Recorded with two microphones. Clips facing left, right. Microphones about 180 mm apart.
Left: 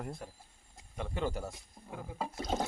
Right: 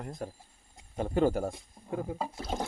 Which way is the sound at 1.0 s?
45° right (ahead or behind).